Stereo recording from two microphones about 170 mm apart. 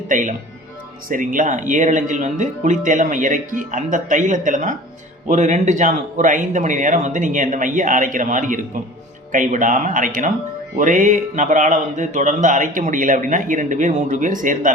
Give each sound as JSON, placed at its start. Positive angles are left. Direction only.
{"t": 0.1, "sound": "speech", "side_deg": -50}